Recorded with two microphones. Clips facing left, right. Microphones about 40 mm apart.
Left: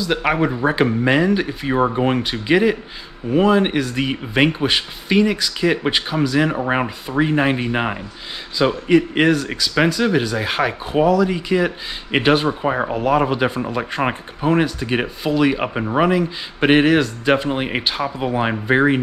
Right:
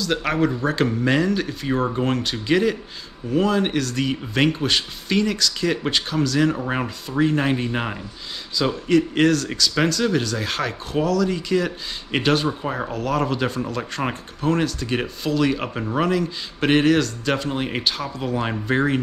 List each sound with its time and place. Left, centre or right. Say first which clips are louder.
0.0 s speech: left 3 dB; centre